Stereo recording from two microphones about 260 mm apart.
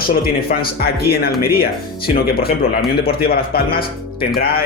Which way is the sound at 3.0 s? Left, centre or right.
Left.